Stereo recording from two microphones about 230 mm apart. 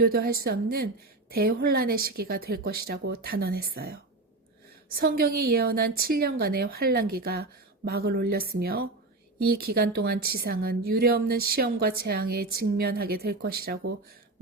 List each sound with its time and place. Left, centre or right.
0.0 s a woman's voice: right
4.9 s a woman's voice: right